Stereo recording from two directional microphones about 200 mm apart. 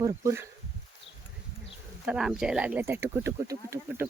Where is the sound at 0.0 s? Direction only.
15° right (ahead or behind).